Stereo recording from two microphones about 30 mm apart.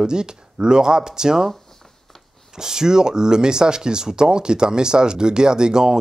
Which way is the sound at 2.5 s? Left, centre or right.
Right.